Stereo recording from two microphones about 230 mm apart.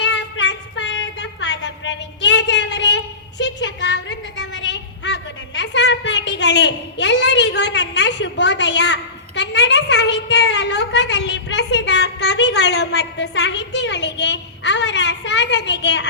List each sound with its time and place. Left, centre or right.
0.0 s child singing: left